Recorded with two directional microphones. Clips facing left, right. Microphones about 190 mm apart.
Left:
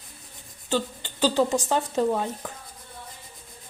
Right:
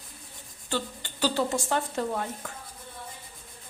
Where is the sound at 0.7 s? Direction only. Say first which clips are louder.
Left 5 dB; 20° left (ahead or behind).